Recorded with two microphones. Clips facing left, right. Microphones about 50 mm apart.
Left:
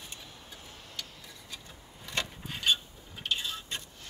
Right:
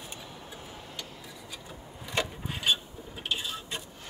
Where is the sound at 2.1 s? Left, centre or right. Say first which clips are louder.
Right 4 dB; centre.